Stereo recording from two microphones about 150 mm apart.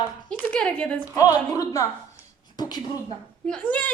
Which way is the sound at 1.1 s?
25° left (ahead or behind).